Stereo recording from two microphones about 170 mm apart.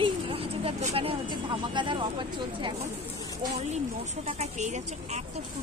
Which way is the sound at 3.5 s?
40° right (ahead or behind).